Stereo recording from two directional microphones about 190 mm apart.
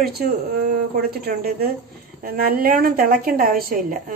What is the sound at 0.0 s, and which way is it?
A woman's voice, 55° right (ahead or behind).